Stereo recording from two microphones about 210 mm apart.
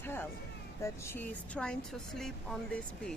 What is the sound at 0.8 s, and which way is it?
Speech, 10° left (ahead or behind).